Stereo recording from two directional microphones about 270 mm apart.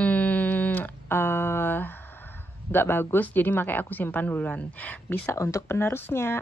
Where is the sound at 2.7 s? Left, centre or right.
Centre.